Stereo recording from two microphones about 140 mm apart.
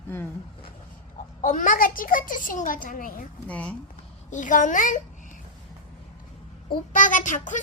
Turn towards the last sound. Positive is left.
turn(degrees=65)  # may be behind; listen again after turning